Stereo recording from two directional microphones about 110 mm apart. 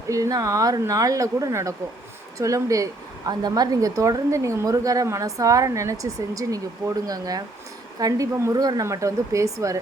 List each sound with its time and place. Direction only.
0.1 s speech: 30° right (ahead or behind)